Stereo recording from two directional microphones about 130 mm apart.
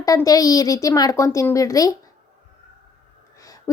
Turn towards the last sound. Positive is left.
turn(degrees=25)  # may be behind; listen again after turning